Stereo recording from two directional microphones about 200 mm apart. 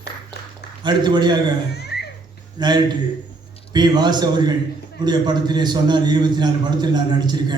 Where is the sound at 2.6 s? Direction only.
20° right (ahead or behind).